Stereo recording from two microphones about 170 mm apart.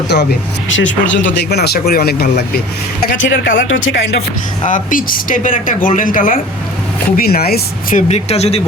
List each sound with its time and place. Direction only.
0.1 s speech: 85° left; by 2.6 s 65° left (ahead or behind)
3.1 s speech: 90° left
4.6 s speech: 50° left (ahead or behind)
7.2 s speech: 65° left (ahead or behind)
8.0 s speech: 40° left (ahead or behind)